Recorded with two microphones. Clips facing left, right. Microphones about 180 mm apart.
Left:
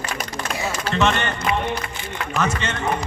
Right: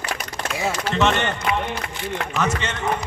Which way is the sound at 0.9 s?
20° right (ahead or behind).